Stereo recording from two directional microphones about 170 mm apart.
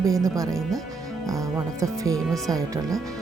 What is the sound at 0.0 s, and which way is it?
Speech, 20° right (ahead or behind).